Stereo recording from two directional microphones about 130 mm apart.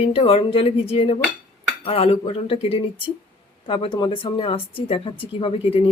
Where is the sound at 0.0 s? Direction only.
45° left (ahead or behind).